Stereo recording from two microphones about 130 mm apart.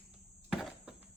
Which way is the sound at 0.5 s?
5° right (ahead or behind).